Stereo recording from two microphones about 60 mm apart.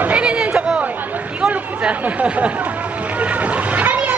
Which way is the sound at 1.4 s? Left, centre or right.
Right.